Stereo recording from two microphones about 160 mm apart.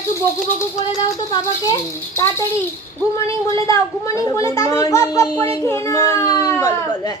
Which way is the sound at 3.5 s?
20° left (ahead or behind).